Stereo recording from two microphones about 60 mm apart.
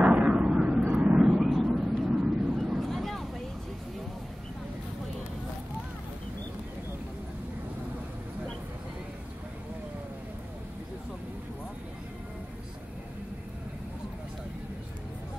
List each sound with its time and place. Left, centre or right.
0.0 s vehicle: centre
2.0 s vehicle: centre
2.8 s vehicle: centre